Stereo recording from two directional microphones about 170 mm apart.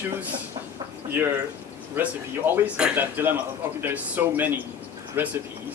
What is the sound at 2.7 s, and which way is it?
Speech, 10° right (ahead or behind).